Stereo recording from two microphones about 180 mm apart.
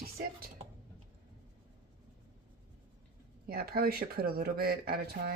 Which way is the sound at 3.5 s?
60° right (ahead or behind).